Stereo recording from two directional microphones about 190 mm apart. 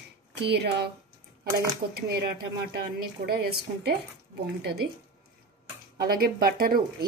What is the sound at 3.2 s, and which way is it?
Speech, 55° right (ahead or behind).